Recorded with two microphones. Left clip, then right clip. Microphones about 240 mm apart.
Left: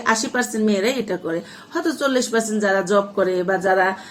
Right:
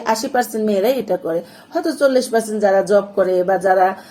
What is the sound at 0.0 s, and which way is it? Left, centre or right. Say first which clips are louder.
A woman's voice: right 2 dB; centre.